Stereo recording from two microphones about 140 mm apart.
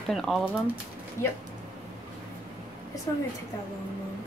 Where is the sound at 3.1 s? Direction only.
25° left (ahead or behind).